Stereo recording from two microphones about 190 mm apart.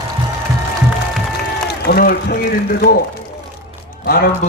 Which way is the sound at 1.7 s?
55° left (ahead or behind).